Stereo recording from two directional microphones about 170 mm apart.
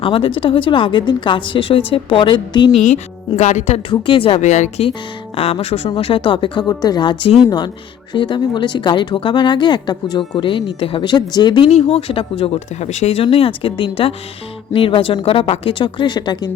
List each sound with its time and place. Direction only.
0.0 s speech: 30° left (ahead or behind)
2.7 s speech: 45° left (ahead or behind)
3.9 s speech: 30° left (ahead or behind)
4.4 s speech: 45° left (ahead or behind); by 11.7 s 25° left (ahead or behind)
11.7 s speech: 35° left (ahead or behind)